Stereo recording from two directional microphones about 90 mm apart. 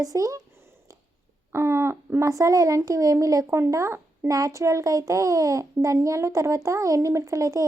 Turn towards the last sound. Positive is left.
turn(degrees=-35)  # may be behind; listen again after turning